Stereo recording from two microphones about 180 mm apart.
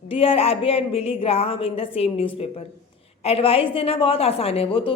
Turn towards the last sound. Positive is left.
turn(degrees=30)  # may be behind; listen again after turning